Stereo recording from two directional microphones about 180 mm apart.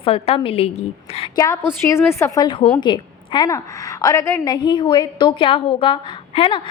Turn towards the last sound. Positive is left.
turn(degrees=30)  # may be behind; listen again after turning